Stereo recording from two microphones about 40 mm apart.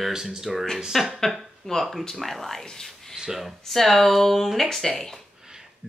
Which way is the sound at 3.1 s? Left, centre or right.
Centre.